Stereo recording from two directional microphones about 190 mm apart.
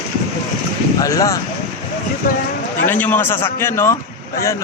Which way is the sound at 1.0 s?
20° left (ahead or behind).